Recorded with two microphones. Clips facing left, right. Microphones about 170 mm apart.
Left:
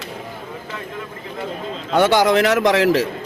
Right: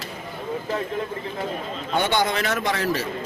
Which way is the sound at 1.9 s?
90° left.